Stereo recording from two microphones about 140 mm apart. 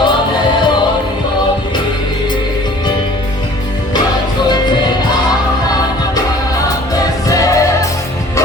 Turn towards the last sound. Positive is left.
turn(degrees=25)  # may be behind; listen again after turning